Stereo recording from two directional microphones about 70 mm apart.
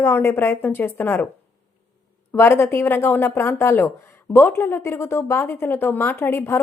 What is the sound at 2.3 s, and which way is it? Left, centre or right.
A woman's voice, left.